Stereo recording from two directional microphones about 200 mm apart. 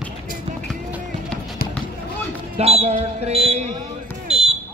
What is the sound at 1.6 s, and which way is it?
Basketball bounce, 45° left (ahead or behind).